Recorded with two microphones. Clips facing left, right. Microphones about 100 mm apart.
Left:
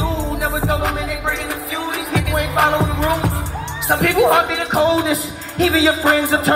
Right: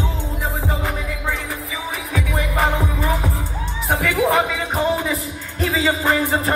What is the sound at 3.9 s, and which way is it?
Speech, 70° left (ahead or behind).